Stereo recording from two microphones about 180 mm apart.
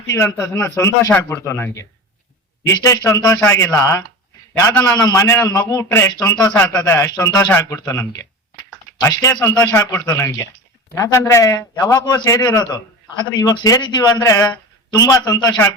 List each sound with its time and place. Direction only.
0.1 s a man's voice: 15° left (ahead or behind)